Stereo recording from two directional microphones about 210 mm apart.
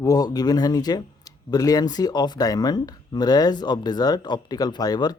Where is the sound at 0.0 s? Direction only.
15° left (ahead or behind).